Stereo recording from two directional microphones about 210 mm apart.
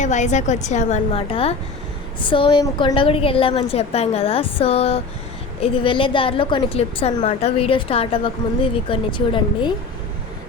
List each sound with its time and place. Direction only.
0.0 s a woman's voice: 35° left (ahead or behind)